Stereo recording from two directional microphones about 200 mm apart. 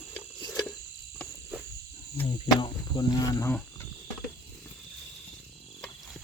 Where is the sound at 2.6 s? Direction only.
20° left (ahead or behind).